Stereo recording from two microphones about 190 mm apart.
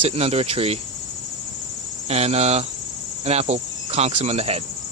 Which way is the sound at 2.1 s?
35° right (ahead or behind).